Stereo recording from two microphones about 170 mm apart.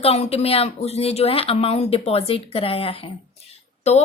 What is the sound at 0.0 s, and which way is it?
A woman's voice, 35° left (ahead or behind).